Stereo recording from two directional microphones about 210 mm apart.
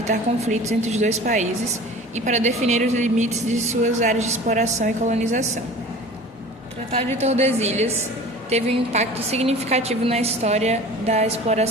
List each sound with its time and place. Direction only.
0.1 s a woman's voice: 35° right (ahead or behind)
7.2 s a woman's voice: 30° right (ahead or behind)